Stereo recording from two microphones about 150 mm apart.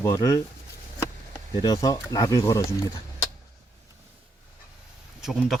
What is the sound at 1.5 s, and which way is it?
Speech, 25° left (ahead or behind).